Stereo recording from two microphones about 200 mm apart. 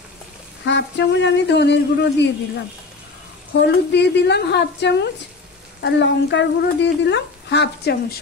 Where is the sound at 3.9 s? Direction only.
60° left (ahead or behind).